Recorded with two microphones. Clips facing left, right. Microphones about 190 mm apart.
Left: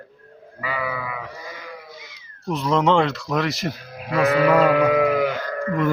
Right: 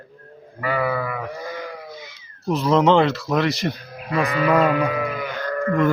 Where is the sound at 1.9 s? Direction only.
Centre (ahead or behind).